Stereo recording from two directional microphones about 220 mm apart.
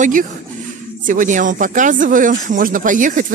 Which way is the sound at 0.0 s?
35° right (ahead or behind).